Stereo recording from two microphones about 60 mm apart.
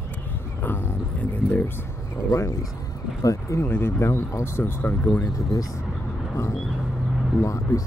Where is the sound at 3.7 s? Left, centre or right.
Left.